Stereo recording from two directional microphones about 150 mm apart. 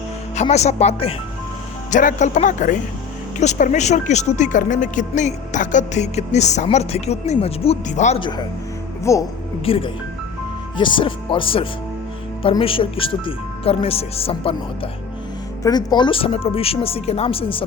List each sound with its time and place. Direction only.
0.4 s speech: 45° left (ahead or behind)
1.9 s speech: 55° left (ahead or behind)
8.2 s speech: 30° left (ahead or behind)
9.1 s speech: 20° left (ahead or behind)
9.6 s speech: 40° left (ahead or behind)
15.6 s speech: 30° left (ahead or behind)